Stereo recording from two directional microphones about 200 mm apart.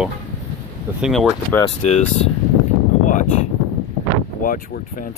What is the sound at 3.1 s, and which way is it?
Speech, 35° left (ahead or behind).